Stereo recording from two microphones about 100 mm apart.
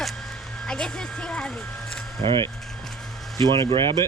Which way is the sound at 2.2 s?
55° right (ahead or behind).